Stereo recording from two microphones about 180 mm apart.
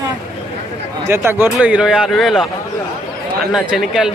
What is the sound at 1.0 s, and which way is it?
Speech, 15° right (ahead or behind).